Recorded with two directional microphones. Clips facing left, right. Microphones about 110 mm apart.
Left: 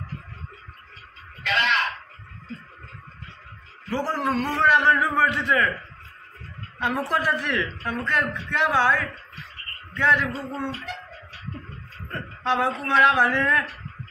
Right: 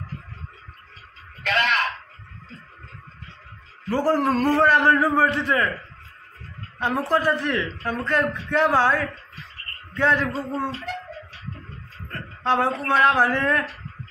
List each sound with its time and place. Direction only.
1.4 s a sound: 50° right (ahead or behind)
3.9 s a man's voice: 45° right (ahead or behind)
6.8 s a man's voice: 30° right (ahead or behind)
12.4 s a man's voice: 40° right (ahead or behind)